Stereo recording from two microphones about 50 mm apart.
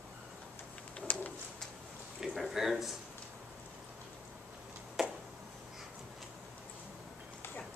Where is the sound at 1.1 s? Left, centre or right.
Left.